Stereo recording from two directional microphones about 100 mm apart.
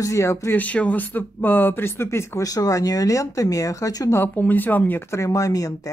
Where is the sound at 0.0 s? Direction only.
30° left (ahead or behind).